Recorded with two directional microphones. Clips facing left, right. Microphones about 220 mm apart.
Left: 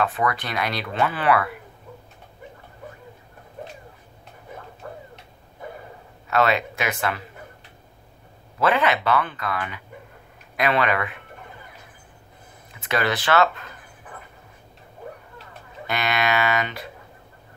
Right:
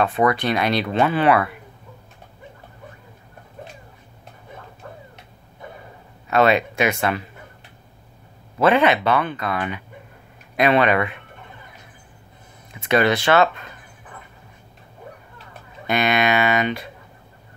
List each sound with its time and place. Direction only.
0.0 s speech: 25° right (ahead or behind)
6.3 s speech: 20° right (ahead or behind)
8.5 s speech: 25° right (ahead or behind)
12.8 s speech: 25° right (ahead or behind)
15.9 s speech: 20° right (ahead or behind)